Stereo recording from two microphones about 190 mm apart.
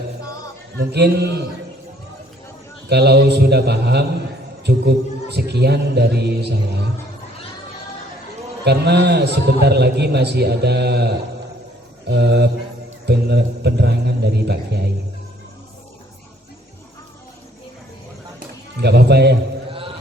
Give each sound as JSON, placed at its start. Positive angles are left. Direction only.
{"t": 0.8, "sound": "a man's voice", "side_deg": -60}
{"t": 2.9, "sound": "a man's voice", "side_deg": -60}
{"t": 8.6, "sound": "a man's voice", "side_deg": -60}
{"t": 18.3, "sound": "a sound", "side_deg": -60}